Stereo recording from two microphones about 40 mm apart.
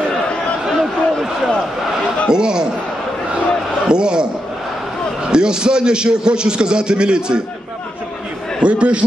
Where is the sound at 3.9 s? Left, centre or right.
Right.